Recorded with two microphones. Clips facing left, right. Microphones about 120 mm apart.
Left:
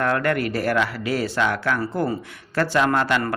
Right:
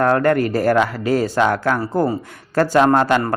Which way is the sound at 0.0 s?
35° right (ahead or behind).